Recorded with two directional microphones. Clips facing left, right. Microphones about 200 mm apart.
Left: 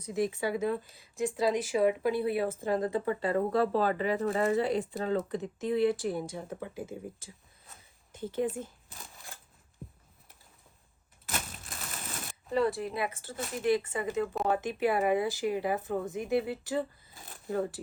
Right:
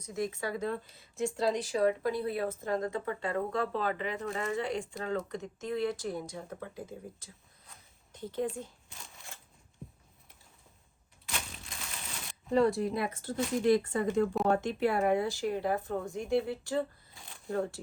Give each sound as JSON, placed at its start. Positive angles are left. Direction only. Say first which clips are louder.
{"t": 0.4, "sound": "speech", "louder": "left 4 dB", "side_deg": 5}
{"t": 1.7, "sound": "speech", "louder": "left 2 dB", "side_deg": 15}
{"t": 2.9, "sound": "speech", "louder": "left 4 dB", "side_deg": 35}
{"t": 4.7, "sound": "speech", "louder": "left 4 dB", "side_deg": 5}
{"t": 6.3, "sound": "speech", "louder": "left 3 dB", "side_deg": 15}
{"t": 7.7, "sound": "shuffling cards", "louder": "left 2 dB", "side_deg": 5}
{"t": 9.8, "sound": "a sound", "louder": "left 1 dB", "side_deg": 0}
{"t": 11.3, "sound": "crushing", "louder": "left 3 dB", "side_deg": 45}
{"t": 12.5, "sound": "speech", "louder": "right 2 dB", "side_deg": 0}